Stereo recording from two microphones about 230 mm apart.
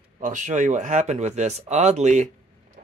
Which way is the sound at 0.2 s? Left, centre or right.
Right.